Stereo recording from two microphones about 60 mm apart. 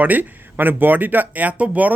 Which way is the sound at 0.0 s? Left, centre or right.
Right.